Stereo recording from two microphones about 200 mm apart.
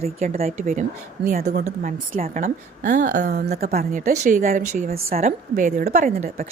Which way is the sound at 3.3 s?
55° right (ahead or behind).